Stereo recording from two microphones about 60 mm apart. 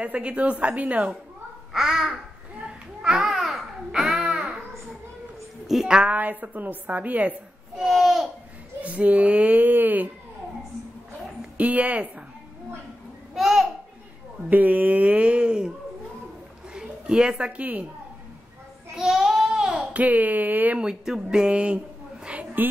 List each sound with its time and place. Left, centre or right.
0.0 s a woman's voice: right
1.7 s babbling: centre
5.7 s a woman's voice: centre
6.1 s a woman's voice: right
7.7 s babbling: centre
8.8 s speech: right
11.5 s speech: right
13.3 s babbling: centre
14.5 s a woman's voice: right
16.7 s speech: centre
18.9 s child singing: centre
19.9 s a woman's voice: right
20.8 s a woman's voice: centre; by 22.7 s right